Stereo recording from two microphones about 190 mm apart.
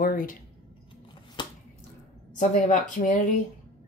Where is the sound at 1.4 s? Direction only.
25° left (ahead or behind).